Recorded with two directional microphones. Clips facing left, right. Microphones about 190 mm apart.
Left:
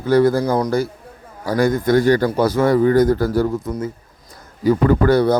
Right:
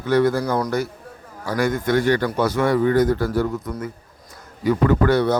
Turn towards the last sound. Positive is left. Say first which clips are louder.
# left 3 dB
turn(degrees=35)  # may be behind; listen again after turning